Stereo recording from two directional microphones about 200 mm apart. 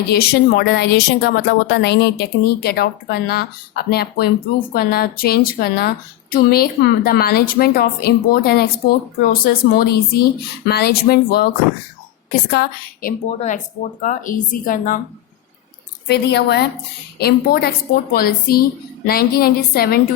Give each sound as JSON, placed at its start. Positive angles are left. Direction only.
{"t": 0.1, "sound": "a woman's voice", "side_deg": 50}
{"t": 12.5, "sound": "a woman's voice", "side_deg": 50}
{"t": 16.0, "sound": "a woman's voice", "side_deg": 55}